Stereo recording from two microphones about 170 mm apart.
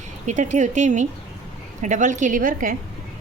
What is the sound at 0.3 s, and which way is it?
A woman's voice, 45° right (ahead or behind).